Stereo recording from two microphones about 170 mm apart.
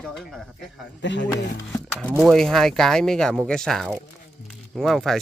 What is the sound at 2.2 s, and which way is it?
Speech, centre (ahead or behind).